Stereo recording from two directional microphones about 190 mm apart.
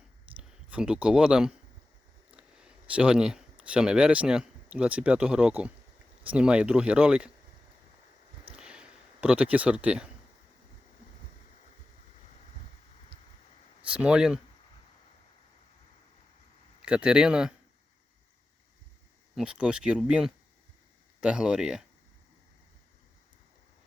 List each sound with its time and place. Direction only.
0.3 s speech: 5° right (ahead or behind)
8.5 s a sound: 5° right (ahead or behind)
13.9 s speech: 5° right (ahead or behind)
16.8 s speech: 5° right (ahead or behind)
19.4 s speech: 5° right (ahead or behind)